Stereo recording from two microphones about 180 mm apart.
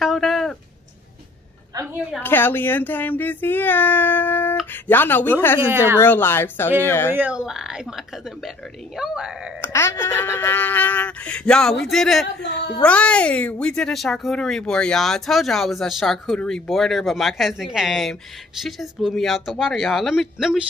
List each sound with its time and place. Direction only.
0.0 s a sound: centre (ahead or behind)
2.1 s speech: 10° left (ahead or behind)
7.1 s speech: 10° right (ahead or behind)
9.6 s speech: 15° left (ahead or behind)
12.4 s speech: 75° left (ahead or behind)
12.8 s speech: 5° left (ahead or behind)